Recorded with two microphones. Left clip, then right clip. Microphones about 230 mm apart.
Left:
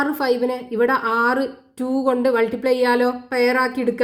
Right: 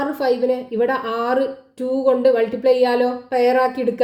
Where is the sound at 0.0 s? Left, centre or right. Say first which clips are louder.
Right 1 dB; left.